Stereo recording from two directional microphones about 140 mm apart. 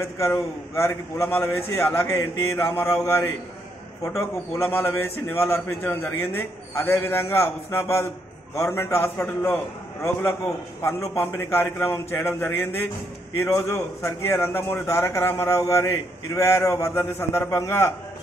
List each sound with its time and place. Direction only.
0.0 s a man's voice: 20° left (ahead or behind)
10.8 s a man's voice: 20° left (ahead or behind)